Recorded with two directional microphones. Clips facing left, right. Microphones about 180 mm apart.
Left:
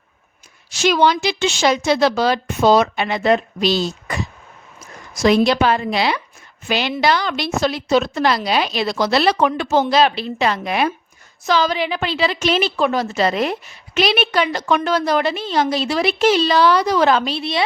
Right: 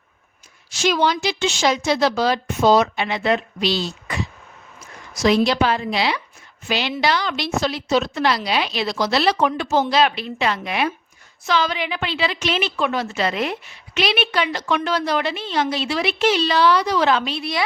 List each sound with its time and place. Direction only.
0.7 s a woman's voice: 70° left (ahead or behind)
9.9 s a woman's voice: 35° left (ahead or behind)
17.4 s a woman's voice: 25° left (ahead or behind)